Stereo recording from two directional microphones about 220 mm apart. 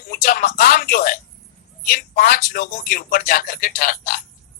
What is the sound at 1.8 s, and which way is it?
Speech, 40° left (ahead or behind).